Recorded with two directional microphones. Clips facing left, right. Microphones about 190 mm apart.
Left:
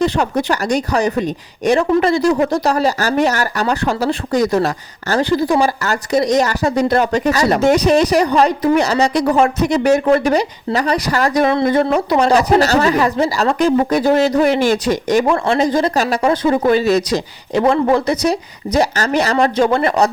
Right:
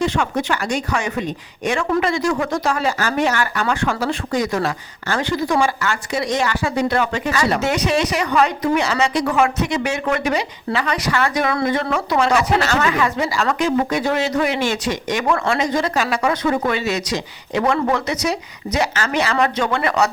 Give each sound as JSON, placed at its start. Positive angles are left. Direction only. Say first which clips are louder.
{"t": 0.0, "sound": "speech", "louder": "left 4 dB", "side_deg": 35}